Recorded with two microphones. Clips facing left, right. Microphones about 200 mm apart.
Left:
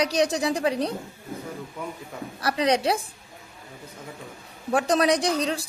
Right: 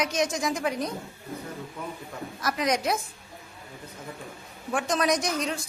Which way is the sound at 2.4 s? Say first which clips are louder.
Left 4 dB; 30° left (ahead or behind).